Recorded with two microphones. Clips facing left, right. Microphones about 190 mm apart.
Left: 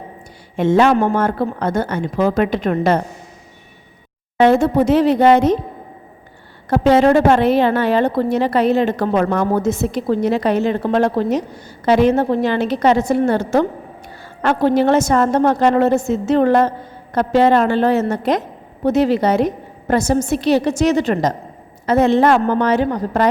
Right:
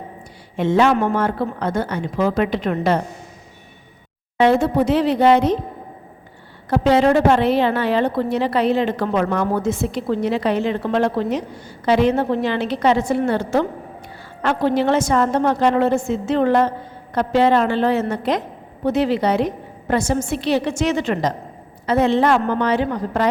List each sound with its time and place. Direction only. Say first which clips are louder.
0.5 s a woman's voice: left 3 dB; 45° left (ahead or behind)
4.4 s a woman's voice: left 3 dB; 50° left (ahead or behind)
6.7 s a woman's voice: left 3 dB; 45° left (ahead or behind)